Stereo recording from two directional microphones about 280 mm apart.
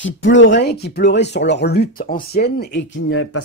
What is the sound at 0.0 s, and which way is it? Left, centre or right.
Speech, left.